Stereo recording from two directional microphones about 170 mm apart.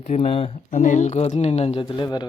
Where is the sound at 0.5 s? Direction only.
50° left (ahead or behind); by 2.2 s 25° left (ahead or behind).